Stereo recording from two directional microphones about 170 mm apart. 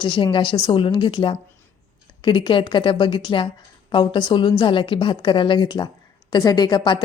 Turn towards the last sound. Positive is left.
turn(degrees=25)  # may be behind; listen again after turning